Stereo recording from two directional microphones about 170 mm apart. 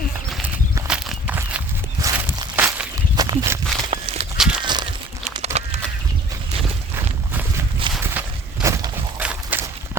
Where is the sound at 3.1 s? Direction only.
25° right (ahead or behind).